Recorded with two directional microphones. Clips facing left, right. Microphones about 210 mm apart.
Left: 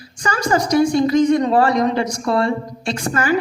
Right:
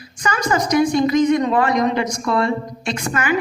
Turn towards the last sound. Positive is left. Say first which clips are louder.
# left 2 dB
turn(degrees=35)  # may be behind; listen again after turning